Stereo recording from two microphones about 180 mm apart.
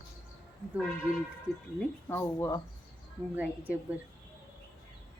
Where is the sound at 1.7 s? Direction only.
10° left (ahead or behind).